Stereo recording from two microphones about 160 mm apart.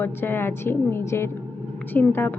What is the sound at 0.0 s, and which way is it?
A woman's voice, 15° left (ahead or behind).